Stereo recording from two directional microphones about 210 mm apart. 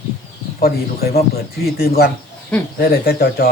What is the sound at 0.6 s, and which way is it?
Speech, 45° left (ahead or behind).